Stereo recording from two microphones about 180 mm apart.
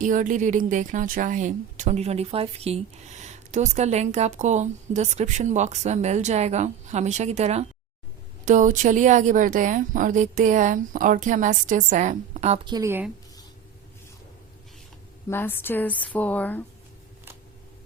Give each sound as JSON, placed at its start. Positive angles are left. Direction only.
{"t": 0.0, "sound": "a woman's voice", "side_deg": -45}
{"t": 12.6, "sound": "a woman's voice", "side_deg": -25}
{"t": 15.3, "sound": "speech", "side_deg": 10}